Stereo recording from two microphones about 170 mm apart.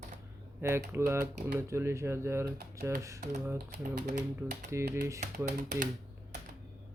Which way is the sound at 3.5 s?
60° right (ahead or behind).